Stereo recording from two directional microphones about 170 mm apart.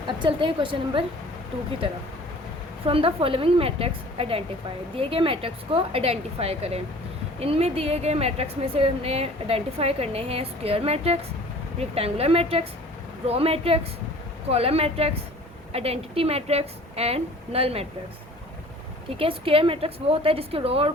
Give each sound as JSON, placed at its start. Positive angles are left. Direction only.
{"t": 0.2, "sound": "a woman's voice", "side_deg": -30}
{"t": 2.8, "sound": "a woman's voice", "side_deg": -30}
{"t": 19.1, "sound": "a woman's voice", "side_deg": -30}